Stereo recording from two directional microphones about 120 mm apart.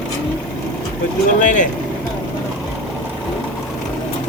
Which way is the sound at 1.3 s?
90° left.